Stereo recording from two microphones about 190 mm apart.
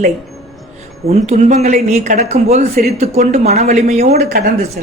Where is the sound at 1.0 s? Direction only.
35° right (ahead or behind).